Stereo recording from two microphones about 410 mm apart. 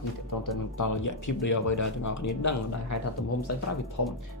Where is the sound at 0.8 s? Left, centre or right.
Left.